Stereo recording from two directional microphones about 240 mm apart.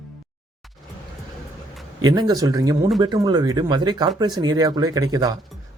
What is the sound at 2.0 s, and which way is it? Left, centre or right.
Speech, centre.